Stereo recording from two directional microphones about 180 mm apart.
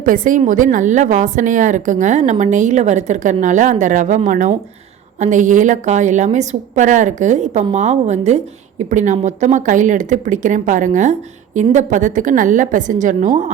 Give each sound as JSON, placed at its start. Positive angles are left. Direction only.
{"t": 0.0, "sound": "a woman's voice", "side_deg": -50}